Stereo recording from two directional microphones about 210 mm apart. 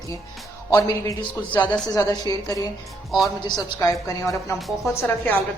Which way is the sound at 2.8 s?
Centre (ahead or behind).